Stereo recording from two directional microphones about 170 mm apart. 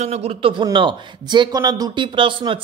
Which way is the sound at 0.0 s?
35° right (ahead or behind).